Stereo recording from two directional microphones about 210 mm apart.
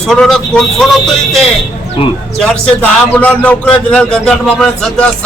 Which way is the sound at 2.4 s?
5° left (ahead or behind).